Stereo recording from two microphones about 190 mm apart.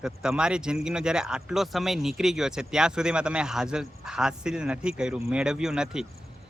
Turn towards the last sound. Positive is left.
turn(degrees=-5)  # may be behind; listen again after turning